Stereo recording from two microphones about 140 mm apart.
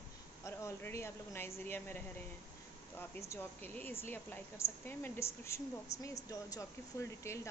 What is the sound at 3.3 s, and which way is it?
A woman's voice, 15° left (ahead or behind).